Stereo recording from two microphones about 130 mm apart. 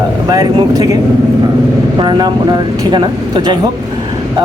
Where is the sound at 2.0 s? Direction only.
35° right (ahead or behind).